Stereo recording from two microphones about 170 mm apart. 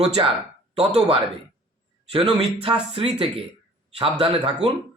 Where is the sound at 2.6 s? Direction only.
35° right (ahead or behind).